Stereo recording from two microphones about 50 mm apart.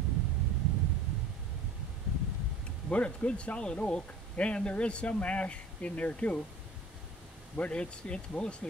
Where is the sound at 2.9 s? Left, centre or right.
Left.